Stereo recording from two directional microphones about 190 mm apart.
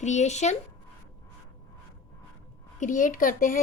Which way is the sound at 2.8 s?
45° left (ahead or behind).